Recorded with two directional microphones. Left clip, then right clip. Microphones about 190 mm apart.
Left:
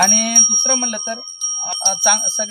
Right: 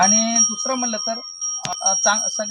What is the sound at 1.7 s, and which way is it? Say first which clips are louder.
Speech: left 2 dB; 10° left (ahead or behind).